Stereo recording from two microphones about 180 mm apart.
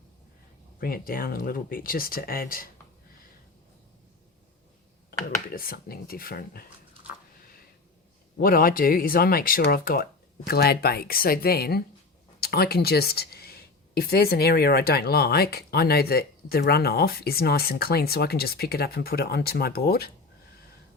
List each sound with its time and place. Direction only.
0.8 s speech: 55° left (ahead or behind)
5.5 s speech: 55° left (ahead or behind)
8.4 s speech: 55° left (ahead or behind)